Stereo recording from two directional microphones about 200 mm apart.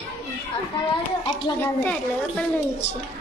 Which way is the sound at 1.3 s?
10° left (ahead or behind).